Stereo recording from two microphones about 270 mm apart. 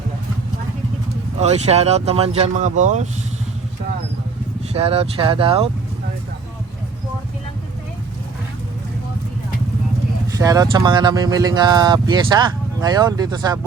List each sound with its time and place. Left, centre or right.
1.4 s speech: right
4.7 s speech: right
10.2 s speech: centre